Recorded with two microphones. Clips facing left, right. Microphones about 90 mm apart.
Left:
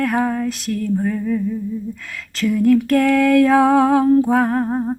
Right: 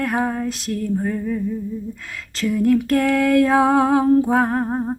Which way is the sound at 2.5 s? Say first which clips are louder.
Left 2 dB; 15° right (ahead or behind).